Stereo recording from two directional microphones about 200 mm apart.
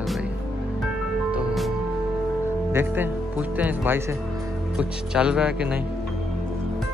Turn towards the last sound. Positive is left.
turn(degrees=-5)  # may be behind; listen again after turning